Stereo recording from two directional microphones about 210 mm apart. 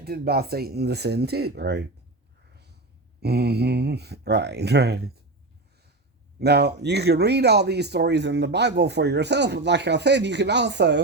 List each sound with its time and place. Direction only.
0.0 s speech: 50° right (ahead or behind)
3.2 s speech: 50° right (ahead or behind)
6.4 s speech: 50° right (ahead or behind)